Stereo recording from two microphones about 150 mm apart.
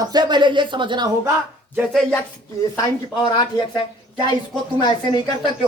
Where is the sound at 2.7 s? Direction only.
25° left (ahead or behind).